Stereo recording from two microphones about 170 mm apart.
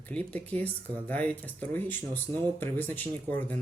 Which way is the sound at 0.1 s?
5° left (ahead or behind).